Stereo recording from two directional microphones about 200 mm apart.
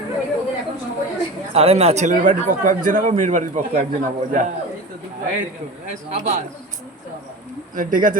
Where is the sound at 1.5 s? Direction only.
30° right (ahead or behind).